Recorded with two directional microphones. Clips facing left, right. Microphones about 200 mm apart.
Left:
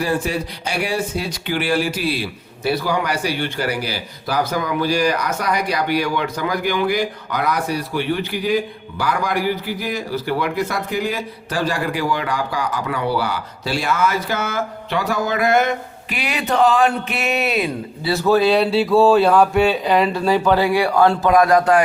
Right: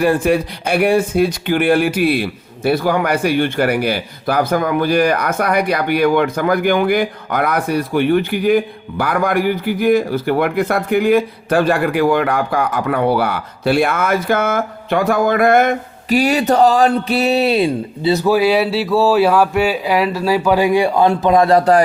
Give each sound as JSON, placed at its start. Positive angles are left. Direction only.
{"t": 0.0, "sound": "a man's voice", "side_deg": -55}
{"t": 18.1, "sound": "speech", "side_deg": -15}